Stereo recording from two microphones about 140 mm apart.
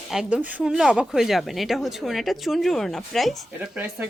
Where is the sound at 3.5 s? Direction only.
10° right (ahead or behind).